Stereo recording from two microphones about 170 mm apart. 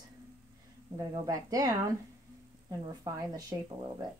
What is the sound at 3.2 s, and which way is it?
Speech, 25° right (ahead or behind).